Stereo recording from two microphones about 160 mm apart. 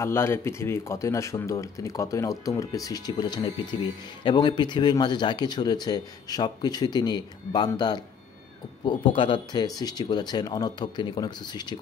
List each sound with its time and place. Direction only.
0.0 s a man's voice: 15° left (ahead or behind)